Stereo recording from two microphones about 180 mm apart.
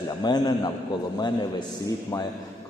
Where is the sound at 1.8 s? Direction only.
20° left (ahead or behind).